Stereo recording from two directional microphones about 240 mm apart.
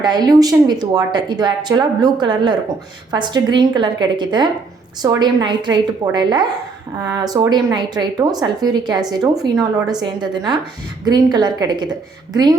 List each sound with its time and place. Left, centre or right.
0.0 s a woman's voice: centre